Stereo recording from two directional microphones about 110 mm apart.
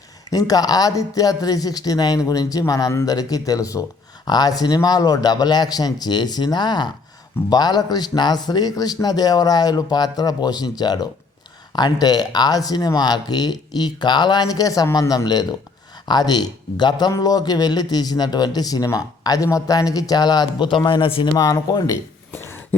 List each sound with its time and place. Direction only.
0.3 s a man's voice: 35° left (ahead or behind); by 21.2 s 50° left (ahead or behind)
21.3 s a man's voice: 30° left (ahead or behind)
22.3 s a sound: 20° left (ahead or behind)